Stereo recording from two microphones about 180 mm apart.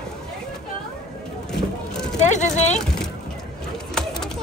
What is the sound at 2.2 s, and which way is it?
Speech, 40° left (ahead or behind).